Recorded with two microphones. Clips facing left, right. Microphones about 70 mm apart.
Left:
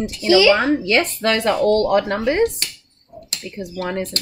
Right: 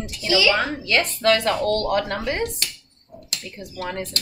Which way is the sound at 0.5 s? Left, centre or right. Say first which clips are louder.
Left 5 dB; centre.